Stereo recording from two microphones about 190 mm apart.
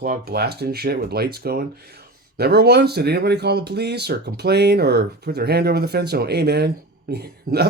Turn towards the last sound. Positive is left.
turn(degrees=-55)  # may be behind; listen again after turning